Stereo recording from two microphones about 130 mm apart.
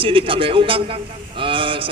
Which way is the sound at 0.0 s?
45° right (ahead or behind).